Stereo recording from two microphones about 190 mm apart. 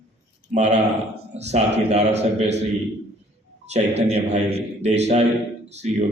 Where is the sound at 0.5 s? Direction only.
35° right (ahead or behind).